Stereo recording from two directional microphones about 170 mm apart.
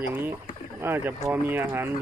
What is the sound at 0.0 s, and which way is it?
Speech, 15° right (ahead or behind).